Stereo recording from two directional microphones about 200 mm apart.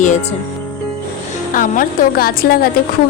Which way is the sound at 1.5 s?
45° left (ahead or behind).